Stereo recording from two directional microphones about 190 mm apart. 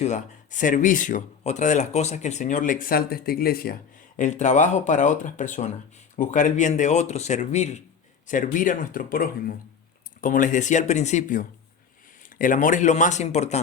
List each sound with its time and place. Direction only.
0.0 s speech: 40° left (ahead or behind)
4.2 s speech: 40° left (ahead or behind)